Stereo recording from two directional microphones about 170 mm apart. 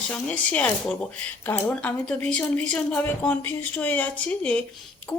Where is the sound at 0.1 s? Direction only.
10° left (ahead or behind).